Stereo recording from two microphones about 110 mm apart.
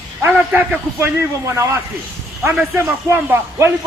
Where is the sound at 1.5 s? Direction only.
25° right (ahead or behind).